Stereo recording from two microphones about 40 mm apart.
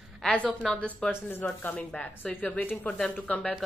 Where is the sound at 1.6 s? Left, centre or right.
Left.